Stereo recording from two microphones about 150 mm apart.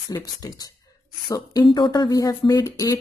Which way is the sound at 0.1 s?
25° left (ahead or behind).